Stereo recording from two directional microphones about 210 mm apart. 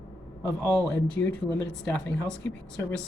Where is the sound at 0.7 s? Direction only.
5° left (ahead or behind).